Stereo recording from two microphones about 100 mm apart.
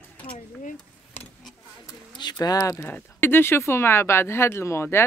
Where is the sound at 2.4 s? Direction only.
35° left (ahead or behind).